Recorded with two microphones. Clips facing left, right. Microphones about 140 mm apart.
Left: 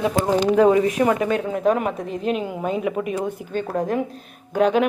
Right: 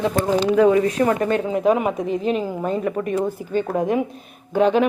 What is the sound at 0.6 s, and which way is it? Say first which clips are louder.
Speech: right 1 dB; 25° left (ahead or behind).